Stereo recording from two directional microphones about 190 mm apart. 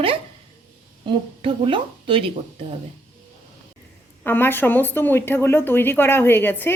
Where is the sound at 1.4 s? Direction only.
30° right (ahead or behind).